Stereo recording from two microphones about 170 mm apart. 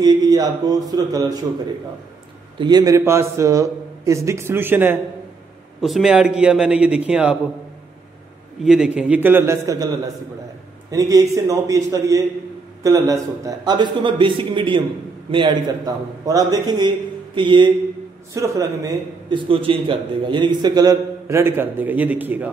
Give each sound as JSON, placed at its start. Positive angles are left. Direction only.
{"t": 0.0, "sound": "a man's voice", "side_deg": -25}
{"t": 2.6, "sound": "a man's voice", "side_deg": -20}
{"t": 5.8, "sound": "a man's voice", "side_deg": 0}
{"t": 8.6, "sound": "a man's voice", "side_deg": -5}
{"t": 10.9, "sound": "a man's voice", "side_deg": -20}
{"t": 18.3, "sound": "a man's voice", "side_deg": -15}